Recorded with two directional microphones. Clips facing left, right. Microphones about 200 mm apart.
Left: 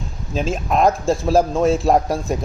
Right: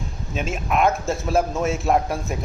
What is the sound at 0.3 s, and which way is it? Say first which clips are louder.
A man's voice: left 4 dB; 30° left (ahead or behind).